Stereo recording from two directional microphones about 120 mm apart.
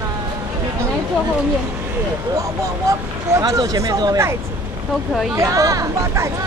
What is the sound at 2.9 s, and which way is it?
Speech, 30° right (ahead or behind).